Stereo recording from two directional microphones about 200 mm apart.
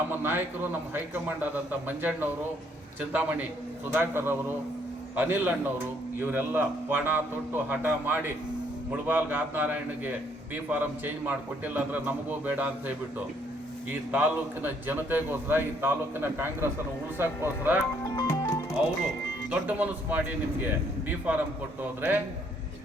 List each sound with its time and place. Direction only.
0.1 s a man's voice: 10° right (ahead or behind)
18.0 s music: 15° left (ahead or behind)
19.5 s a man's voice: 5° right (ahead or behind)